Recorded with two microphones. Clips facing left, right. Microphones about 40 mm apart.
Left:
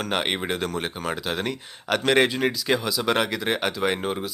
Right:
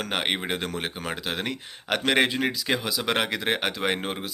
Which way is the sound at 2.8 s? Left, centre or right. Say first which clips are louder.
Left 2 dB; right.